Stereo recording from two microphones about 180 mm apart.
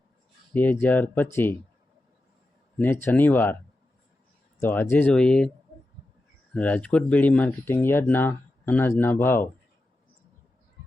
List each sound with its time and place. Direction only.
0.5 s speech: 10° left (ahead or behind)
2.7 s speech: 10° left (ahead or behind)
4.6 s speech: 10° left (ahead or behind)
6.5 s speech: 10° left (ahead or behind)